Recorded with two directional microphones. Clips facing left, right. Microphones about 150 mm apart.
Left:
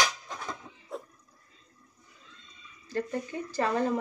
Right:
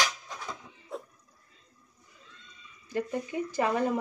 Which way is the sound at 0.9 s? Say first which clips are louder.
Even; centre (ahead or behind).